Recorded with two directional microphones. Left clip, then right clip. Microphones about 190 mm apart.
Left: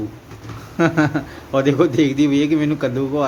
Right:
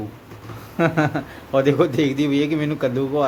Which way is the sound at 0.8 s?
Centre (ahead or behind).